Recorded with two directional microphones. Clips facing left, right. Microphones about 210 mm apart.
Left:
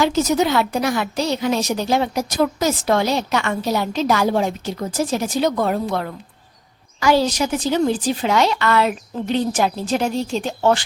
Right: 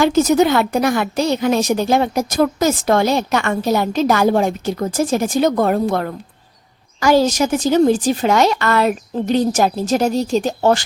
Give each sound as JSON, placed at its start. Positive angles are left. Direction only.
{"t": 0.0, "sound": "a woman's voice", "side_deg": -50}